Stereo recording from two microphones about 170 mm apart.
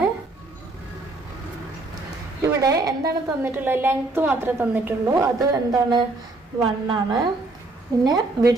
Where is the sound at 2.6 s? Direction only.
20° right (ahead or behind).